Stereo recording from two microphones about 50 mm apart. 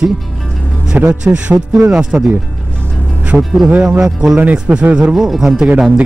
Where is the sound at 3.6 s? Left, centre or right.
Right.